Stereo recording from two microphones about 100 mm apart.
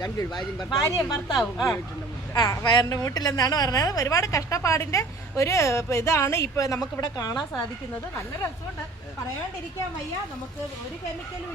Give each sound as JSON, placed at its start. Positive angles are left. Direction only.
{"t": 0.0, "sound": "speech", "side_deg": 40}
{"t": 1.4, "sound": "speech", "side_deg": 0}
{"t": 2.6, "sound": "a woman's voice", "side_deg": 50}